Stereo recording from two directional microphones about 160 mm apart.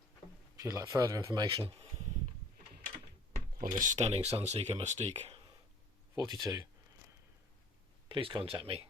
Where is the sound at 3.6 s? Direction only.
55° right (ahead or behind).